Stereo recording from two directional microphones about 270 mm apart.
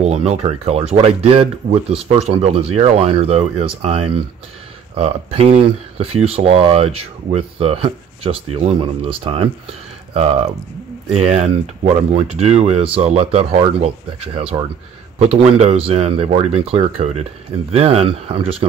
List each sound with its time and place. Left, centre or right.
0.0 s speech: right